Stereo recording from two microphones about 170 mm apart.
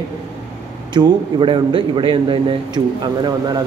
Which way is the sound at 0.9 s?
25° right (ahead or behind).